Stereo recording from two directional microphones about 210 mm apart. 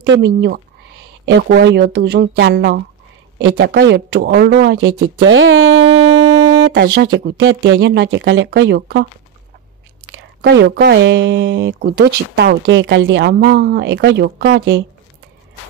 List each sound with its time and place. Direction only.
0.0 s speech: 55° right (ahead or behind)
6.6 s speech: 50° right (ahead or behind)
10.4 s speech: 55° right (ahead or behind)